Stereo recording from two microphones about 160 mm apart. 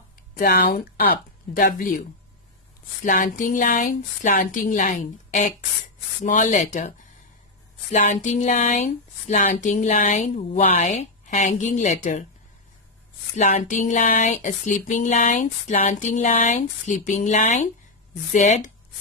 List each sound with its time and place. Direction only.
0.3 s speech: 75° left (ahead or behind); by 12.3 s 50° left (ahead or behind)
13.4 s speech: 50° left (ahead or behind)